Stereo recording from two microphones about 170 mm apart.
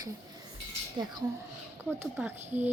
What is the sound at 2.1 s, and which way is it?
Speech, 10° right (ahead or behind).